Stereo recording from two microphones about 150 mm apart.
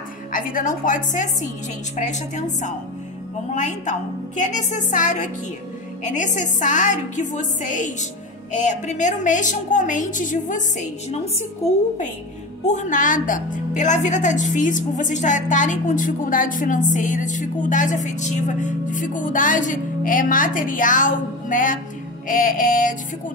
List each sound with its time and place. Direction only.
0.3 s a woman's voice: 65° left (ahead or behind)
3.5 s a woman's voice: 55° left (ahead or behind)
12.6 s a woman's voice: 55° left (ahead or behind)